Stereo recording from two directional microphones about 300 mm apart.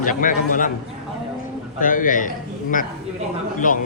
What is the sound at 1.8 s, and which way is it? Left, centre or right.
Speech, left.